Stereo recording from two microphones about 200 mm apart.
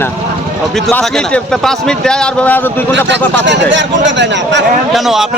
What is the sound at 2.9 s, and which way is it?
A man's voice, 60° right (ahead or behind).